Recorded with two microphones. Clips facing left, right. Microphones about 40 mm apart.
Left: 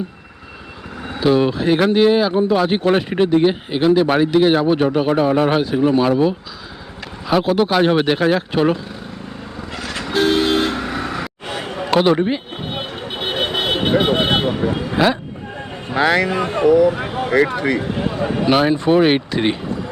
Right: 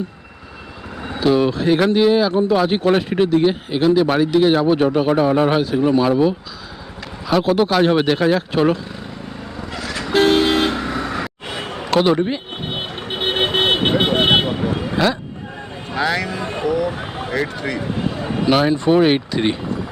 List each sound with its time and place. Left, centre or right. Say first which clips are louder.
1.0 s a man's voice: left 1 dB; centre
9.7 s music: even; left
10.1 s vehicle: right 2 dB; right
10.4 s vehicle: even; centre
11.1 s vehicle: even; centre
11.8 s speech: left 1 dB; centre
13.0 s vehicle: right 3 dB; right
14.4 s vehicle: left 2 dB; centre
14.9 s speech: left 2 dB; centre
16.0 s speech: left 4 dB; left
16.6 s a man's voice: left 8 dB; centre
17.4 s speech: left 5 dB; left
18.3 s a man's voice: even; centre